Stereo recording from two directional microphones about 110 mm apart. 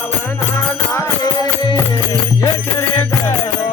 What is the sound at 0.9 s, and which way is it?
Music, 30° left (ahead or behind).